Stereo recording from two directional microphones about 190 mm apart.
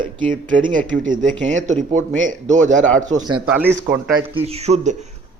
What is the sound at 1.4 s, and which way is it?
Speech, 40° right (ahead or behind).